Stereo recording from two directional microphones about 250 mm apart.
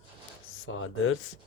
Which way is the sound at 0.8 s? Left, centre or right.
Left.